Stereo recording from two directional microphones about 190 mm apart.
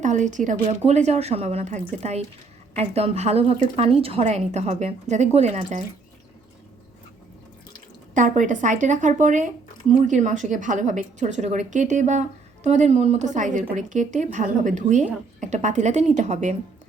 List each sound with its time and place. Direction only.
0.0 s a woman's voice: 40° right (ahead or behind)
8.1 s a woman's voice: 45° right (ahead or behind)